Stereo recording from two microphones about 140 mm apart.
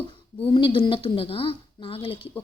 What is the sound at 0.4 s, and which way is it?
Speech, 40° left (ahead or behind).